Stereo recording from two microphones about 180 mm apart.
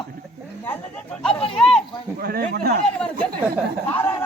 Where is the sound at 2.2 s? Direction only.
55° right (ahead or behind).